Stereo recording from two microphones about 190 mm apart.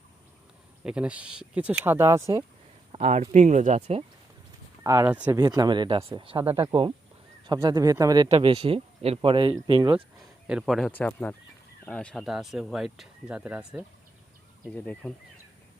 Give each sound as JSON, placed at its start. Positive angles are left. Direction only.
{"t": 0.9, "sound": "speech", "side_deg": -5}
{"t": 2.9, "sound": "speech", "side_deg": -30}
{"t": 4.8, "sound": "speech", "side_deg": -15}
{"t": 5.4, "sound": "speech", "side_deg": -20}
{"t": 10.4, "sound": "speech", "side_deg": -5}